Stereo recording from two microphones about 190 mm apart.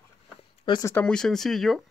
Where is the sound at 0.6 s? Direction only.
20° left (ahead or behind).